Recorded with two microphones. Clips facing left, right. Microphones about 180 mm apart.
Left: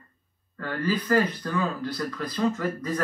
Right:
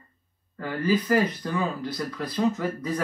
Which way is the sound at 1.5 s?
20° right (ahead or behind).